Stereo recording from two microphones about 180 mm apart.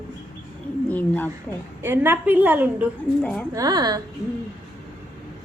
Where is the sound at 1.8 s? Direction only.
10° right (ahead or behind).